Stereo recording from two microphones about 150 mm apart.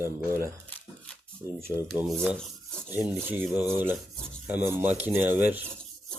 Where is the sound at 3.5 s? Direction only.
15° right (ahead or behind).